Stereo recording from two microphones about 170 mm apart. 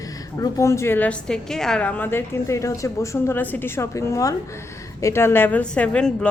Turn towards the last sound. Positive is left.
turn(degrees=5)  # may be behind; listen again after turning